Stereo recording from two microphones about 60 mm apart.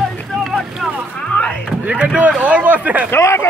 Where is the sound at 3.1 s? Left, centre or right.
Left.